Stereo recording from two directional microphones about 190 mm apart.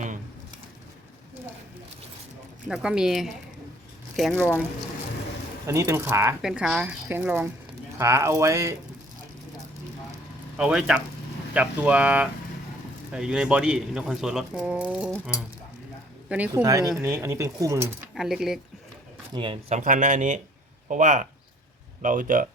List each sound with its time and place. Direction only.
2.6 s speech: 5° right (ahead or behind)
5.6 s speech: 15° right (ahead or behind)
10.6 s speech: 5° right (ahead or behind)
16.5 s speech: 20° right (ahead or behind)
18.1 s speech: centre (ahead or behind)
19.3 s speech: 25° right (ahead or behind); by 22.4 s 45° right (ahead or behind)